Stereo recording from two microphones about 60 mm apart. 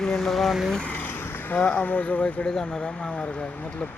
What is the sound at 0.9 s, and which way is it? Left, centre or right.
Vehicle, left.